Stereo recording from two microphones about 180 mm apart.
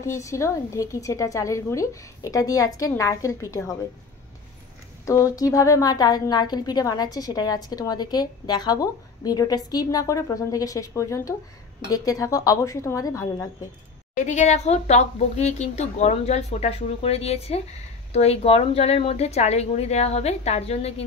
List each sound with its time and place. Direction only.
0.0 s a woman's voice: 15° left (ahead or behind)
5.0 s a woman's voice: 15° left (ahead or behind)
14.1 s a woman's voice: 40° left (ahead or behind)